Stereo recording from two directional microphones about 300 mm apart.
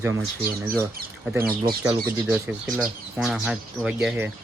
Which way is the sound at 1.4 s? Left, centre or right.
Right.